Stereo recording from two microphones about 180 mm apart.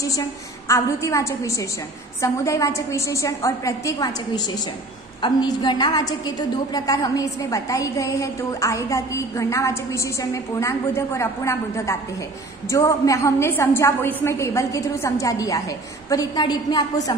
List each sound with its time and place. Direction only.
0.0 s a woman's voice: 20° left (ahead or behind)